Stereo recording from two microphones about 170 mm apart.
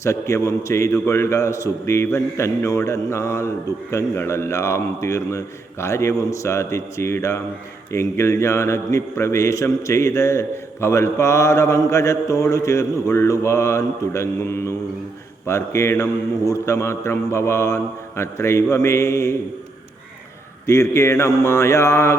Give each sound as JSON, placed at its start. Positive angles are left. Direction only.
{"t": 0.0, "sound": "a man's voice", "side_deg": 15}
{"t": 20.7, "sound": "a man's voice", "side_deg": 15}